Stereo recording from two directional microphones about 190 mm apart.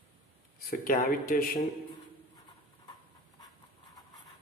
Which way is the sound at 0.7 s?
45° left (ahead or behind).